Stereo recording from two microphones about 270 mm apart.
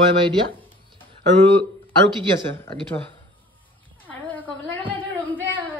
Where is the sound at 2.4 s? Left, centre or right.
Centre.